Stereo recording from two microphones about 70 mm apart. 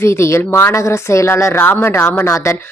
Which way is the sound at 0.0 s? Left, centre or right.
Left.